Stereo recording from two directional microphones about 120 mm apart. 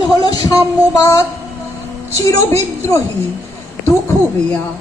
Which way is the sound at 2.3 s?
25° left (ahead or behind).